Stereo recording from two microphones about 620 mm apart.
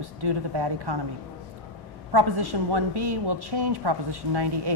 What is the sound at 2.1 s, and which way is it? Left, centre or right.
A woman's voice, right.